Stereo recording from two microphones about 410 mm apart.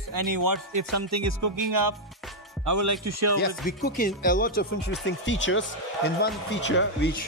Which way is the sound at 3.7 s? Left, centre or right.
Left.